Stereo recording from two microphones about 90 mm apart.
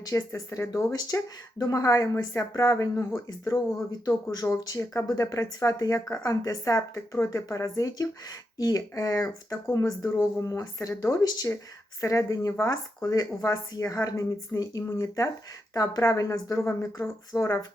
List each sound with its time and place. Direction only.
0.0 s speech: 35° left (ahead or behind)
0.9 s speech: 45° left (ahead or behind)